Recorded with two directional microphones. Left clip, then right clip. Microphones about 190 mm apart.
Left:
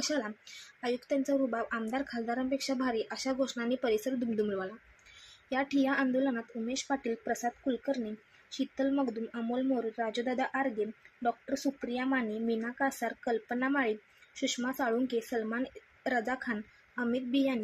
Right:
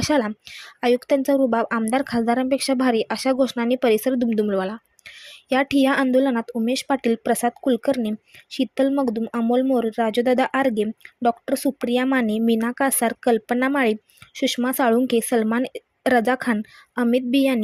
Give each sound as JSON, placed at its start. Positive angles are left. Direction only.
{"t": 0.0, "sound": "speech", "side_deg": -45}